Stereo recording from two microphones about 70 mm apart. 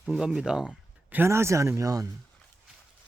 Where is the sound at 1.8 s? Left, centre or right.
Right.